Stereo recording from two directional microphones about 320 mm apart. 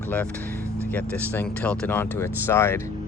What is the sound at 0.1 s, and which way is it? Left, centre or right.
Speech, centre.